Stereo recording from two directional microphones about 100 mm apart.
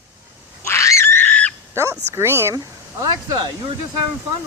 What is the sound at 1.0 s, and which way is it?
Fowl, 20° left (ahead or behind).